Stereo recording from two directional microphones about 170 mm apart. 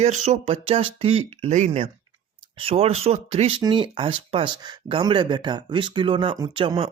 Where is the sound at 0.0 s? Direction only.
40° right (ahead or behind).